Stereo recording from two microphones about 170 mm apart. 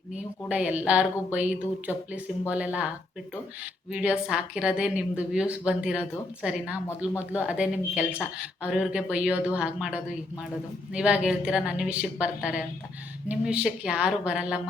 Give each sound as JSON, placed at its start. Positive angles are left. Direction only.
{"t": 0.4, "sound": "speech", "side_deg": -10}
{"t": 3.9, "sound": "a woman's voice", "side_deg": -5}